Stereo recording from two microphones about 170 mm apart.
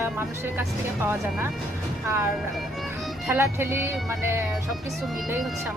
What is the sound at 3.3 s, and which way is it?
Speech, 15° right (ahead or behind).